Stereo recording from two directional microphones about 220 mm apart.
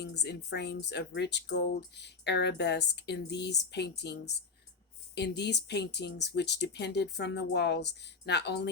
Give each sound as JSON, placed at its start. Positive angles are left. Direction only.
{"t": 0.0, "sound": "speech", "side_deg": 50}